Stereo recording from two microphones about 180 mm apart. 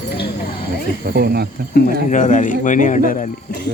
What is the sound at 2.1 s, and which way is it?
A man's voice, 45° left (ahead or behind).